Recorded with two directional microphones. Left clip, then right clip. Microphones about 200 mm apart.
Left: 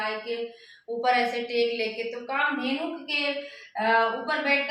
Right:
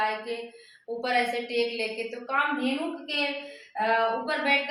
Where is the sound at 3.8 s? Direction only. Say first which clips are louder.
Left 2 dB; 10° right (ahead or behind).